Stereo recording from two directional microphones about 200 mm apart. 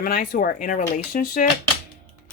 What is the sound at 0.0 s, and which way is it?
Speech, 45° left (ahead or behind).